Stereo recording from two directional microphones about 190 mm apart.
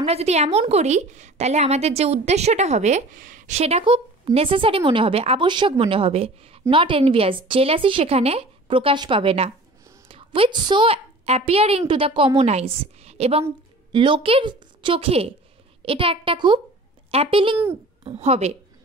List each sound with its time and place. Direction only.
0.0 s a woman's voice: 35° right (ahead or behind)